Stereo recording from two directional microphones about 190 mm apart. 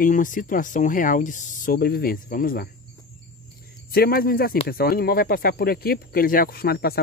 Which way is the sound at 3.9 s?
55° left (ahead or behind).